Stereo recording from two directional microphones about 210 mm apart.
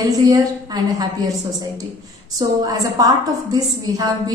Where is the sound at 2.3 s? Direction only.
15° right (ahead or behind).